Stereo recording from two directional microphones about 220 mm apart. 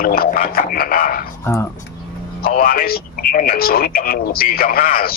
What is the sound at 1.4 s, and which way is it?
Speech, 10° left (ahead or behind).